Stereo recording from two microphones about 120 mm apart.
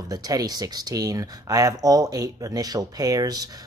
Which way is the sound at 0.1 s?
30° right (ahead or behind).